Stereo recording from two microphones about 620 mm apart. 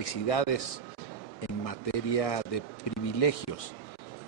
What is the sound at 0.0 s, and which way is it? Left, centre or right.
Speech, left.